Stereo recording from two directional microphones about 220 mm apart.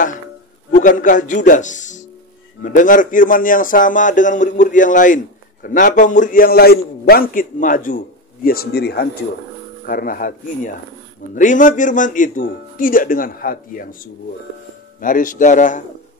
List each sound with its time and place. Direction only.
0.7 s a man's voice: 35° left (ahead or behind)
15.0 s a man's voice: 40° left (ahead or behind)